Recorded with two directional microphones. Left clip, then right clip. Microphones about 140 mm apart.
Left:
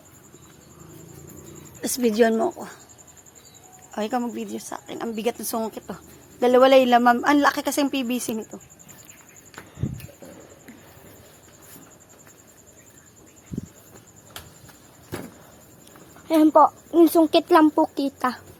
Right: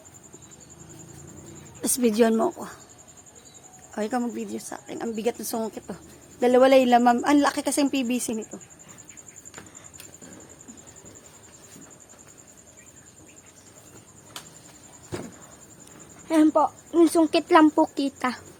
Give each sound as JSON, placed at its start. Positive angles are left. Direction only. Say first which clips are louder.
{"t": 1.8, "sound": "a woman's voice", "louder": "left 2 dB", "side_deg": -20}
{"t": 3.9, "sound": "a woman's voice", "louder": "left 2 dB", "side_deg": 0}
{"t": 16.5, "sound": "speech", "louder": "left 6 dB", "side_deg": 45}
{"t": 16.9, "sound": "a woman's voice", "louder": "left 3 dB", "side_deg": 10}